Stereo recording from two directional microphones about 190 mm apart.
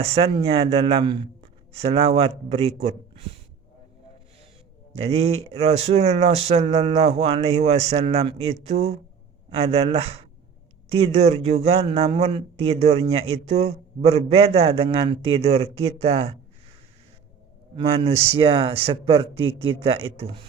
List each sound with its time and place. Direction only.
0.0 s speech: 35° right (ahead or behind)
4.9 s speech: 35° right (ahead or behind)
17.7 s speech: 30° right (ahead or behind)